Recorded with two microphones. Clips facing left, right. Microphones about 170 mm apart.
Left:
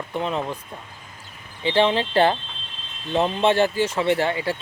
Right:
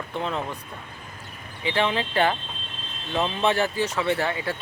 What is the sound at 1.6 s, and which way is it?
Speech, 30° left (ahead or behind).